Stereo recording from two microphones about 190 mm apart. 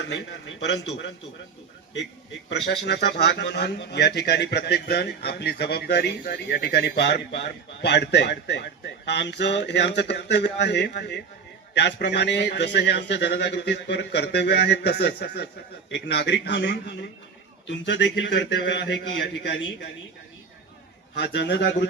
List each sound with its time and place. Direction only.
0.0 s a man's voice: 65° left (ahead or behind)
2.5 s a man's voice: 65° left (ahead or behind)
21.2 s a man's voice: 60° left (ahead or behind)